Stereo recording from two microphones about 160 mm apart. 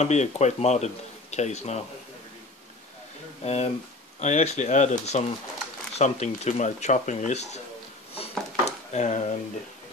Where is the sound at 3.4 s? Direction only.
40° left (ahead or behind).